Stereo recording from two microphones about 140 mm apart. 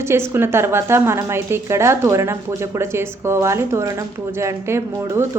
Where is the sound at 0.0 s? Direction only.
20° right (ahead or behind).